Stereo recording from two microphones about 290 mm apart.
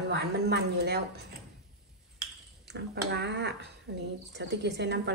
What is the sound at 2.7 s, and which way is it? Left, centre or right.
Speech, right.